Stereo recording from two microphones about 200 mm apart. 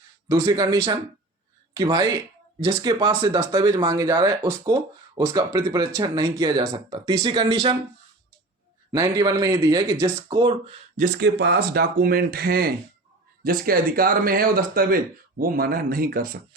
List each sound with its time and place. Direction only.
0.3 s speech: 20° right (ahead or behind)
9.0 s speech: 20° right (ahead or behind)
11.2 s speech: 55° right (ahead or behind)